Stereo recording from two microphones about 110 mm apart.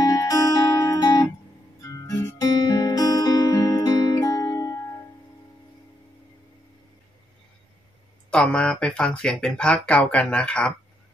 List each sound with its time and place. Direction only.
0.1 s music: 35° left (ahead or behind)
8.3 s speech: 10° left (ahead or behind)